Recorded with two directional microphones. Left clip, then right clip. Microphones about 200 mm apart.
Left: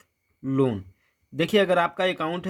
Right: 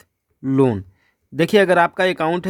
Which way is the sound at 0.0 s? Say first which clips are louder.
Right 7 dB; 45° right (ahead or behind).